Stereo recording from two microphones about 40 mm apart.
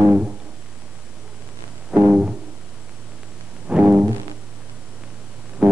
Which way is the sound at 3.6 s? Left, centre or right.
Right.